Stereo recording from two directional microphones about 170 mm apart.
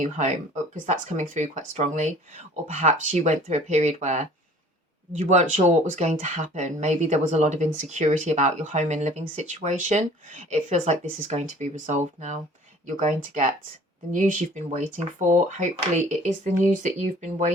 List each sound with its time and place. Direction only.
0.0 s speech: 45° right (ahead or behind)